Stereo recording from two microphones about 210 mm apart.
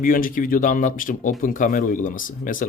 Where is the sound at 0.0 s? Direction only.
40° left (ahead or behind).